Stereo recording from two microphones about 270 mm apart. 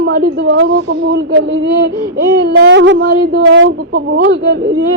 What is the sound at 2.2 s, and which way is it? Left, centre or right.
A woman's voice, right.